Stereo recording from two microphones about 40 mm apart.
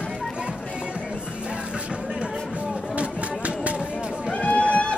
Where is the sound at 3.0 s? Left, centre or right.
Right.